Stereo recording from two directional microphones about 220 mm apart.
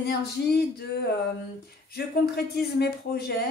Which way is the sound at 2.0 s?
45° left (ahead or behind).